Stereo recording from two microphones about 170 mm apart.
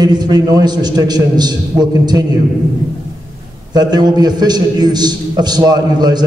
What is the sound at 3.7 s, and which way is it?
A man's voice, 25° right (ahead or behind).